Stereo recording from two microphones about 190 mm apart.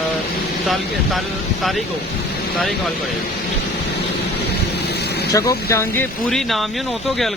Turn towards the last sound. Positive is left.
turn(degrees=0)  # may be behind; listen again after turning